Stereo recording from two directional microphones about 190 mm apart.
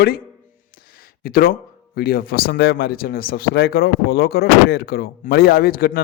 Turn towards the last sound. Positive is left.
turn(degrees=50)  # may be behind; listen again after turning